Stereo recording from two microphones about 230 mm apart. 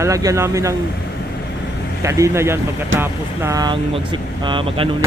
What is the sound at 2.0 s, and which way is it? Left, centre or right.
Speech, centre.